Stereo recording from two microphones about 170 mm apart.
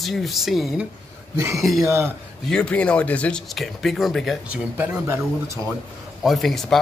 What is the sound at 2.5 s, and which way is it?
Speech, 5° left (ahead or behind).